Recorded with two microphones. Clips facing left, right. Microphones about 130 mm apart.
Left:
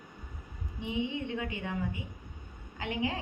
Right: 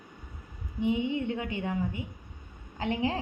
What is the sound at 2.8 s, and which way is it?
Speech, 30° right (ahead or behind).